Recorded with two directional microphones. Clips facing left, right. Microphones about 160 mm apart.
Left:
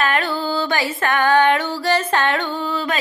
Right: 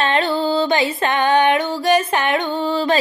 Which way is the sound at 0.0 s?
25° right (ahead or behind).